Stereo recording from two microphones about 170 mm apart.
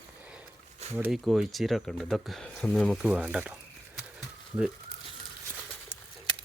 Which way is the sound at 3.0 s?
5° right (ahead or behind).